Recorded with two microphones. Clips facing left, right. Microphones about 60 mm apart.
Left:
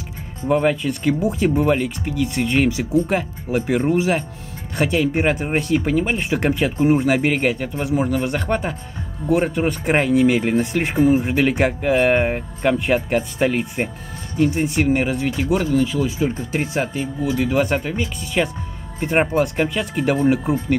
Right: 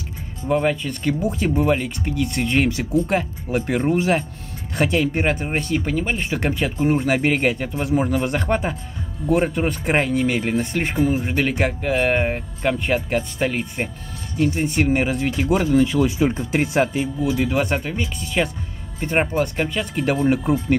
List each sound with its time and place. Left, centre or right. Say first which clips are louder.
0.5 s speech: left 2 dB; centre; by 16.4 s right
16.5 s speech: right 5 dB; right
16.9 s speech: right 1 dB; centre